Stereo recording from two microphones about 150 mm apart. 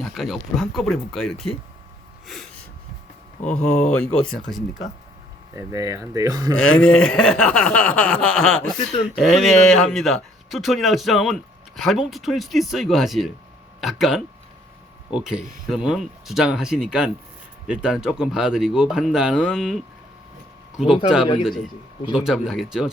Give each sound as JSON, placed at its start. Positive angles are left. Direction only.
{"t": 0.0, "sound": "speech", "side_deg": 0}
{"t": 2.2, "sound": "a sound", "side_deg": 0}
{"t": 3.9, "sound": "speech", "side_deg": 5}
{"t": 5.5, "sound": "speech", "side_deg": -20}
{"t": 6.6, "sound": "speech", "side_deg": 5}
{"t": 8.8, "sound": "speech", "side_deg": 45}
{"t": 9.0, "sound": "speech", "side_deg": -5}